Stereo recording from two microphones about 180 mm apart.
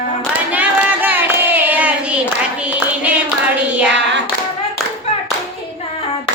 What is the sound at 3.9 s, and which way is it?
Child singing, 80° right.